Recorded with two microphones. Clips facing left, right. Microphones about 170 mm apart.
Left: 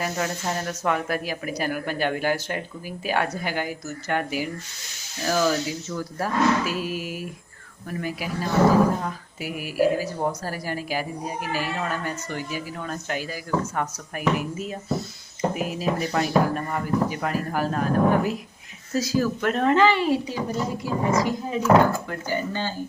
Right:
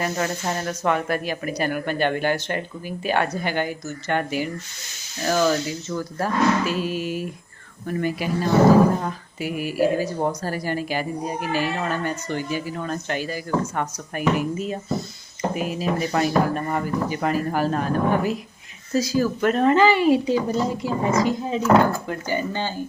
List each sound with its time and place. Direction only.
0.0 s a woman's voice: centre (ahead or behind)
20.2 s speech: 25° right (ahead or behind)